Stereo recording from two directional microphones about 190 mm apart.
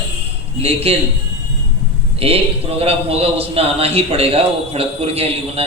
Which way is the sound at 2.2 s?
30° right (ahead or behind).